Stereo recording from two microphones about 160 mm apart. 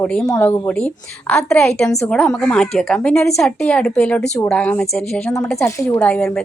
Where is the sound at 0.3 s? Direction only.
20° left (ahead or behind).